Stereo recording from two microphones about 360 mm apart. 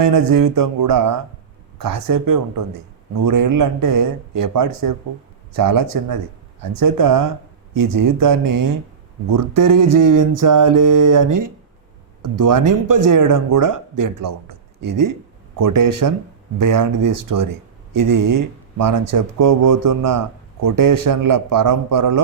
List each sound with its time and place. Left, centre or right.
0.0 s speech: right